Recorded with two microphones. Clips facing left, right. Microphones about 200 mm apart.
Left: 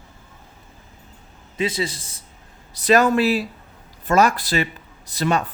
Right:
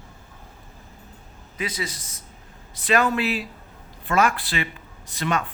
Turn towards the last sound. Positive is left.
turn(degrees=40)  # may be behind; listen again after turning